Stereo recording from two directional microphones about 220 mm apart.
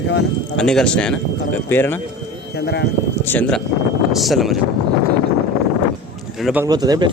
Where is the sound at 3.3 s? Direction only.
5° left (ahead or behind).